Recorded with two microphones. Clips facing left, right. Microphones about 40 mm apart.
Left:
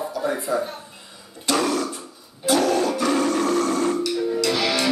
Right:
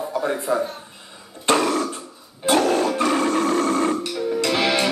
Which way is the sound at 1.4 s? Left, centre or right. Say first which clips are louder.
Right 3 dB; right.